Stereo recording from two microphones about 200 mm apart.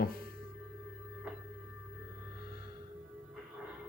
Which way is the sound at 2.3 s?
50° left (ahead or behind).